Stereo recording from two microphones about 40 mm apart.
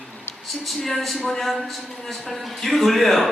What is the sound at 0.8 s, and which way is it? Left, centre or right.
A man's voice, centre.